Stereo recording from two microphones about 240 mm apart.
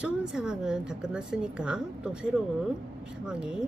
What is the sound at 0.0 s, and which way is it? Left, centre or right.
A woman's voice, centre.